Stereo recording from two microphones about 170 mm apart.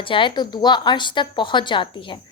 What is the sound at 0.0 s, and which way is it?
A woman's voice, 30° left (ahead or behind).